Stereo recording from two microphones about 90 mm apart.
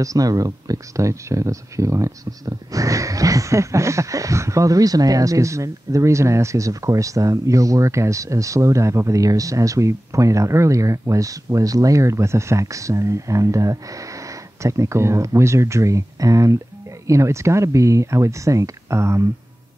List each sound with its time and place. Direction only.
0.0 s speech: 40° right (ahead or behind)